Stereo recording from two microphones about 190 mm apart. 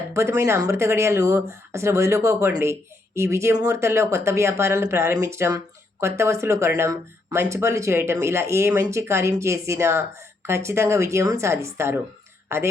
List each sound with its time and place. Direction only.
0.1 s speech: 15° right (ahead or behind)